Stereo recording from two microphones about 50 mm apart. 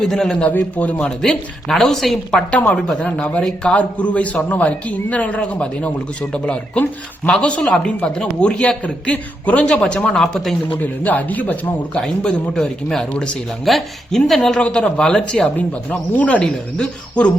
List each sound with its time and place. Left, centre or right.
0.0 s a woman's voice: centre
0.4 s speech: left
1.2 s a woman's voice: centre
2.5 s speech: left
2.7 s a woman's voice: centre
3.2 s speech: left
10.1 s a woman's voice: centre
10.8 s speech: left
11.9 s a woman's voice: centre
14.5 s a woman's voice: centre
15.5 s speech: left
16.4 s speech: centre